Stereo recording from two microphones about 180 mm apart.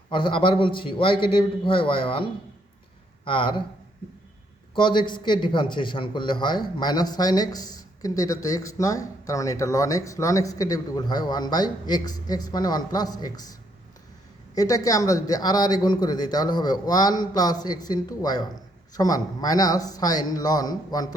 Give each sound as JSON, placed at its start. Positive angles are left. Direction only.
{"t": 0.1, "sound": "a man's voice", "side_deg": 25}
{"t": 4.7, "sound": "a man's voice", "side_deg": 25}